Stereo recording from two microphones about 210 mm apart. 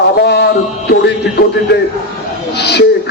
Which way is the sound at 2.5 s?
50° left (ahead or behind).